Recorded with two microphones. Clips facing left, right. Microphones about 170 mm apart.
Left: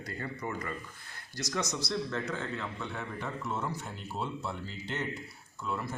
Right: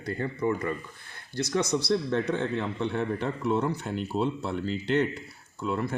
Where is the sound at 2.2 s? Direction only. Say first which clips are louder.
Right 8 dB; 25° right (ahead or behind).